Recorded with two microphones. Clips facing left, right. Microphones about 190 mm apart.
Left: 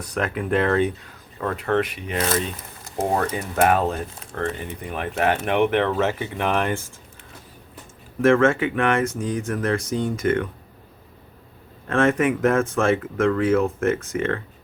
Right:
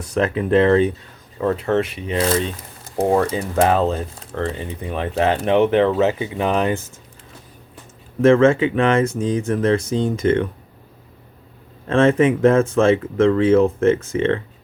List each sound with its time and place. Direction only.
0.1 s speech: 25° right (ahead or behind)
6.0 s speech: 15° right (ahead or behind)
8.2 s speech: 25° right (ahead or behind)
11.9 s speech: 30° right (ahead or behind)